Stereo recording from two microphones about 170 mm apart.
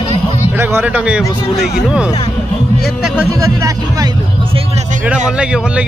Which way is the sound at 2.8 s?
5° right (ahead or behind).